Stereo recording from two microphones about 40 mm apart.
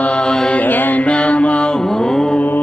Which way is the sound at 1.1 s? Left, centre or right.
Left.